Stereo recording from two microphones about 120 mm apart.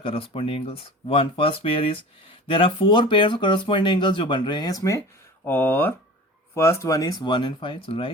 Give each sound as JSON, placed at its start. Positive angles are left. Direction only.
{"t": 0.0, "sound": "speech", "side_deg": 50}